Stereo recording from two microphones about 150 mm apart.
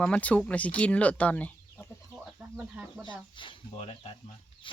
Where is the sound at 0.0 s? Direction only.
10° left (ahead or behind).